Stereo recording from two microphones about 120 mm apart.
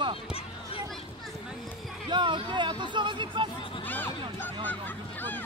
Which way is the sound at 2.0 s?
40° right (ahead or behind).